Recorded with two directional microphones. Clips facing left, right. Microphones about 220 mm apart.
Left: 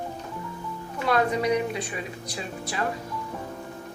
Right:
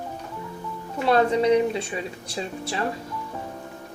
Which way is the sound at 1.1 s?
30° right (ahead or behind).